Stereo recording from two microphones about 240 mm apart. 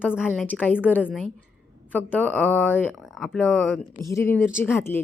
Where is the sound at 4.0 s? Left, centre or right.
Centre.